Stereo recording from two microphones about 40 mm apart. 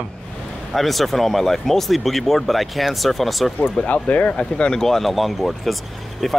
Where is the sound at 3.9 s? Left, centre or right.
Left.